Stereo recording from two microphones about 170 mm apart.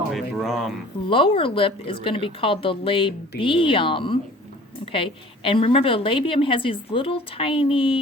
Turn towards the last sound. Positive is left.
turn(degrees=30)  # may be behind; listen again after turning